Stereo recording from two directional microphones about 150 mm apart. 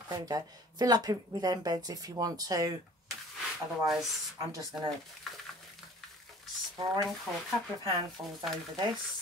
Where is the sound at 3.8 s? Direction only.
Centre (ahead or behind).